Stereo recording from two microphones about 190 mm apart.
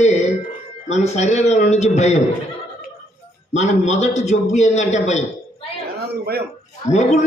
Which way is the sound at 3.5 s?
35° left (ahead or behind).